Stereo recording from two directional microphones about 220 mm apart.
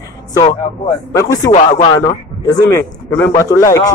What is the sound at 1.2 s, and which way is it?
A man's voice, 15° left (ahead or behind).